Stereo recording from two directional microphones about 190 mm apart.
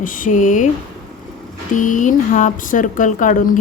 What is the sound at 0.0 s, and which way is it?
Speech, 45° left (ahead or behind).